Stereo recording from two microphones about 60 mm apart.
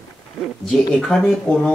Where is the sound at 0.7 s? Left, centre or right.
Centre.